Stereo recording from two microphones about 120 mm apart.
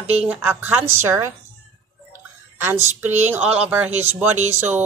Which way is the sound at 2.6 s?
20° right (ahead or behind).